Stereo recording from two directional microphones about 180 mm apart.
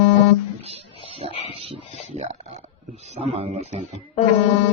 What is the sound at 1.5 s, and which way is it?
Speech, 30° right (ahead or behind).